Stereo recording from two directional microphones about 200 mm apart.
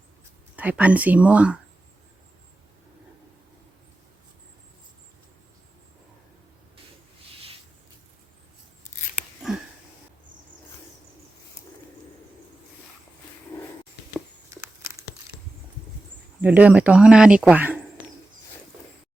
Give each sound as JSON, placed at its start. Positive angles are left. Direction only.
{"t": 0.5, "sound": "speech", "side_deg": -10}
{"t": 8.8, "sound": "scissors", "side_deg": 35}
{"t": 9.5, "sound": "sniff", "side_deg": 0}
{"t": 14.6, "sound": "a sound", "side_deg": -15}
{"t": 16.4, "sound": "speech", "side_deg": -5}